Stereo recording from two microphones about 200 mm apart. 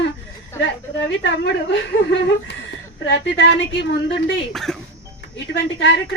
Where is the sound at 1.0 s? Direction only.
60° left (ahead or behind).